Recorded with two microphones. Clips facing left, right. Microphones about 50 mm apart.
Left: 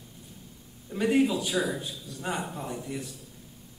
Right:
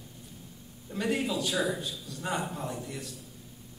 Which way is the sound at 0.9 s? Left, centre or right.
Centre.